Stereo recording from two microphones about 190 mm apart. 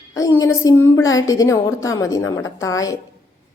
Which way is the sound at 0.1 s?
15° left (ahead or behind).